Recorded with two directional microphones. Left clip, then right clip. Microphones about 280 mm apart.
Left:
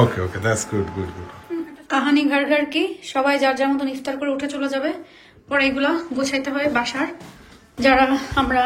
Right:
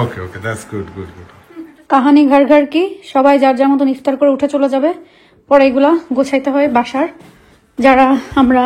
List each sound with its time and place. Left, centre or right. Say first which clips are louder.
0.0 s speech: left 1 dB; centre
1.9 s a woman's voice: right 9 dB; right